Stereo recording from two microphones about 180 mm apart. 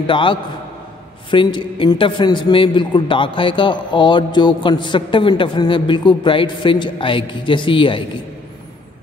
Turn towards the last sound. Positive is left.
turn(degrees=30)  # may be behind; listen again after turning